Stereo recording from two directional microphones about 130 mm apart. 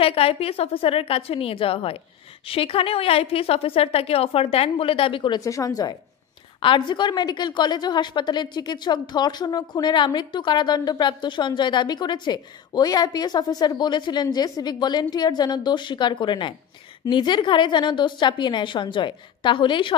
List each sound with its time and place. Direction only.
0.0 s a woman's voice: 50° left (ahead or behind)
5.4 s a woman's voice: 25° left (ahead or behind)